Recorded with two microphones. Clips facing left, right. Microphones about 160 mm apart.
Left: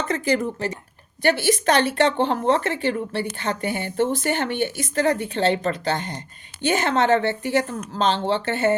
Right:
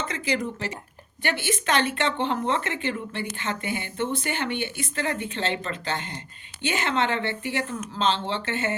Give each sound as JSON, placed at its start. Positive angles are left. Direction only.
{"t": 0.1, "sound": "speech", "side_deg": 50}